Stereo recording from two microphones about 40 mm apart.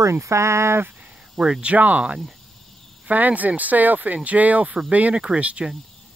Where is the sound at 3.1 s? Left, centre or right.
Right.